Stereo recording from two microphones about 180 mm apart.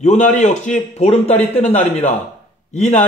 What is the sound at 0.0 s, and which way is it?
A man's voice, 40° left (ahead or behind).